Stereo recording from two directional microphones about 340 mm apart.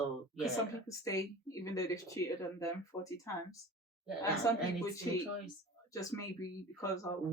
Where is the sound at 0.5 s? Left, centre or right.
Centre.